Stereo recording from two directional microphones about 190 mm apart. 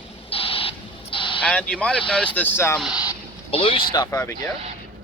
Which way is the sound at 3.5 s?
30° left (ahead or behind).